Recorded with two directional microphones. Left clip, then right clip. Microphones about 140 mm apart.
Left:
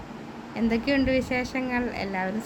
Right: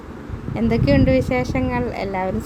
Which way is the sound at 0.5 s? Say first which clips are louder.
Right 7 dB; 20° right (ahead or behind).